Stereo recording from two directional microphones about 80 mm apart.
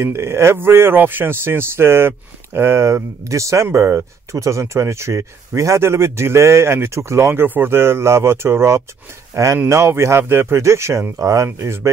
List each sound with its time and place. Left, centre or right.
0.0 s speech: right